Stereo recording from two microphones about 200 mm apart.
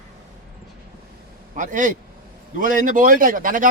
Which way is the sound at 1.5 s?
40° right (ahead or behind).